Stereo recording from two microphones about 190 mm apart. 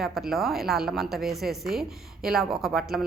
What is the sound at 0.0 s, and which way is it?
A woman's voice, centre (ahead or behind).